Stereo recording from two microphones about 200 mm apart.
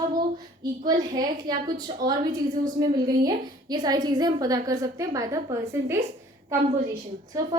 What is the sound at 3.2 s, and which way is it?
A woman's voice, 20° right (ahead or behind).